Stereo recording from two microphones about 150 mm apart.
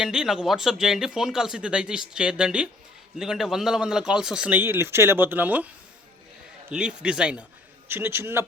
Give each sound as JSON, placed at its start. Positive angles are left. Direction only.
{"t": 0.0, "sound": "a man's voice", "side_deg": -5}